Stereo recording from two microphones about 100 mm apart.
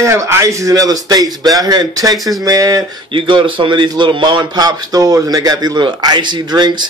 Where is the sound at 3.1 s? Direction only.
60° right (ahead or behind).